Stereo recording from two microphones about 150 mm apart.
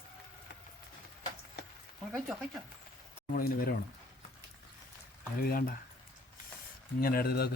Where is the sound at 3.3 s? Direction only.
75° left (ahead or behind).